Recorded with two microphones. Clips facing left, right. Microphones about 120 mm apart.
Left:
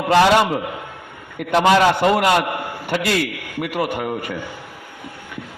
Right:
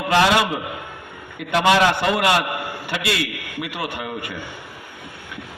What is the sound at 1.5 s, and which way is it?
A man's voice, 40° left (ahead or behind).